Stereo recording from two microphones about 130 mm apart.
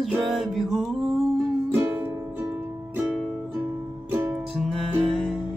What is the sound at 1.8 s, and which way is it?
Music, 20° right (ahead or behind).